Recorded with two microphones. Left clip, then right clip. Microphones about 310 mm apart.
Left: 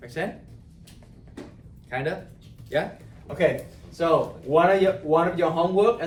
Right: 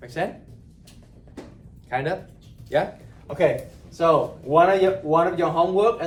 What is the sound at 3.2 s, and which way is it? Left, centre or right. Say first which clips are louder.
Speech: right 2 dB; centre.